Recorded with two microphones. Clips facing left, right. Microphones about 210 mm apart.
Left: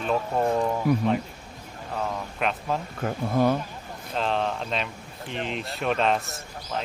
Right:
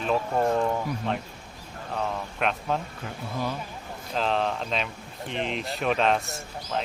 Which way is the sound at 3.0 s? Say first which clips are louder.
Left 9 dB; 55° left (ahead or behind).